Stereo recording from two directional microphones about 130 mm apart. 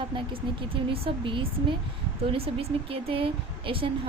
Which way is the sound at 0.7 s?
45° right (ahead or behind).